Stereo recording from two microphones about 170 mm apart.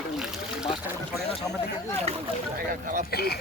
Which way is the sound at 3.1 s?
65° left (ahead or behind).